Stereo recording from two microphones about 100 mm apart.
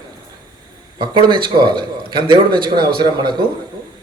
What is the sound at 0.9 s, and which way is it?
A man's voice, 50° right (ahead or behind).